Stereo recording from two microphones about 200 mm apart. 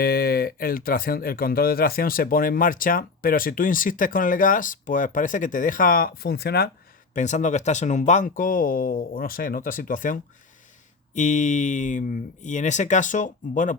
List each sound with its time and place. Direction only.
0.0 s speech: 50° left (ahead or behind)
7.1 s speech: 35° left (ahead or behind)